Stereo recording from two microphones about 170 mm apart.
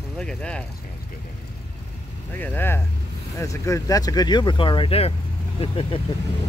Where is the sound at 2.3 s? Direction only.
10° left (ahead or behind); by 6.0 s 30° left (ahead or behind).